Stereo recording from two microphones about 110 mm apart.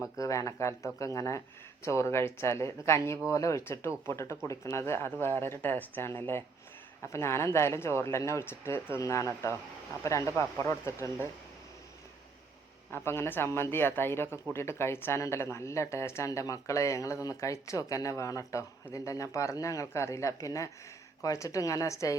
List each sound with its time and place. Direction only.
0.2 s speech: 30° left (ahead or behind)
12.9 s speech: 20° left (ahead or behind)